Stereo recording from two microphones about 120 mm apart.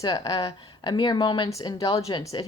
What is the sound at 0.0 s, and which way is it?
A woman's voice, 35° left (ahead or behind).